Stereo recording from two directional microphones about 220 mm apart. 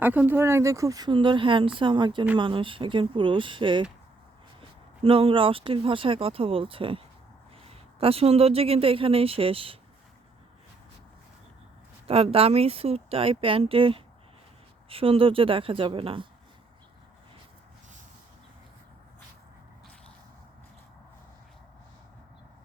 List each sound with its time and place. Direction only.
0.0 s speech: 10° right (ahead or behind)
5.0 s speech: 25° right (ahead or behind)
12.0 s speech: 25° right (ahead or behind)